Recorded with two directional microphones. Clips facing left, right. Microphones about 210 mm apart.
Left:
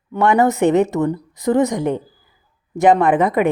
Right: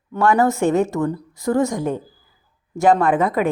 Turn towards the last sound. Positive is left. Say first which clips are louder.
# left 3 dB
turn(degrees=20)  # may be behind; listen again after turning